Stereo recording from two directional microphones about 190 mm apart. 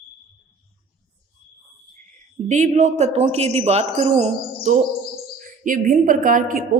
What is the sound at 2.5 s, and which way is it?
A woman's voice, 40° right (ahead or behind).